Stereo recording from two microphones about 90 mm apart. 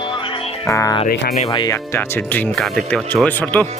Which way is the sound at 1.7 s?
25° left (ahead or behind).